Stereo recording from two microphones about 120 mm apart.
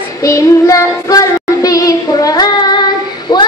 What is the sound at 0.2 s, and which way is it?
Child singing, 25° left (ahead or behind).